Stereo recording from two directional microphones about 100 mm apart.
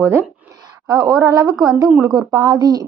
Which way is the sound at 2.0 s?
35° right (ahead or behind).